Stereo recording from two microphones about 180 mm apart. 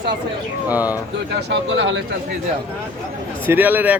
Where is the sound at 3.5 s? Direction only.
10° right (ahead or behind).